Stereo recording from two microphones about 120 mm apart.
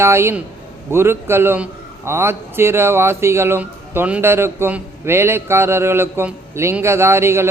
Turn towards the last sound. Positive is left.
turn(degrees=-20)  # may be behind; listen again after turning